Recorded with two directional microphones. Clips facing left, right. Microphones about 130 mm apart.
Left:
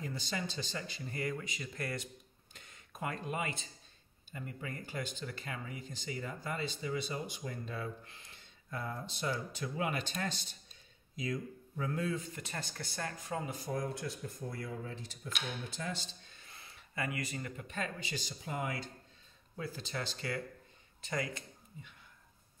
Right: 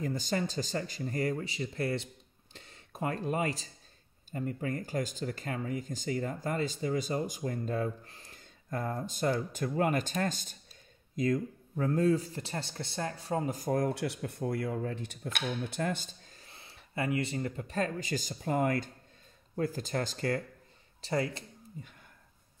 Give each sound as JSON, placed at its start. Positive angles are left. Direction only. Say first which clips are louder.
{"t": 0.0, "sound": "speech", "louder": "right 7 dB", "side_deg": -45}
{"t": 21.0, "sound": "speech", "louder": "right 6 dB", "side_deg": -30}